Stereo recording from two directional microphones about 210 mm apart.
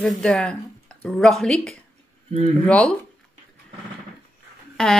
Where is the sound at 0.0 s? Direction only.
Centre (ahead or behind).